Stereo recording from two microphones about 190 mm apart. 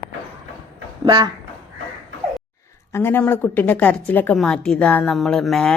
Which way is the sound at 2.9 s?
10° left (ahead or behind).